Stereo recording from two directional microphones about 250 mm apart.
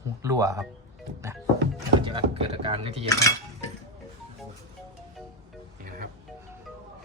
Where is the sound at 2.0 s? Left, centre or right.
Centre.